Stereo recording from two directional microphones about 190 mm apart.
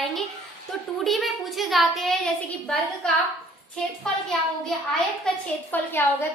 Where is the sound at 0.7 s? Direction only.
Centre (ahead or behind).